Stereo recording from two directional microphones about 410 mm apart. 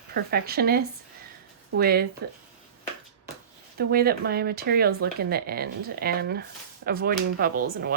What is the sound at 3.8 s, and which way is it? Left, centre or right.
A woman's voice, right.